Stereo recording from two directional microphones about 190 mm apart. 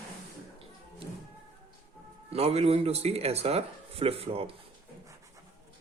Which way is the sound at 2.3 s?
30° right (ahead or behind).